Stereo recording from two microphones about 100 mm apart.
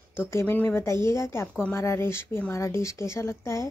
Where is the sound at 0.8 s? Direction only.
30° left (ahead or behind).